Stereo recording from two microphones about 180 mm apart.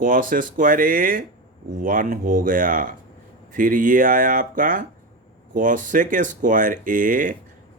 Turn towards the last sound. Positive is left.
turn(degrees=-45)  # may be behind; listen again after turning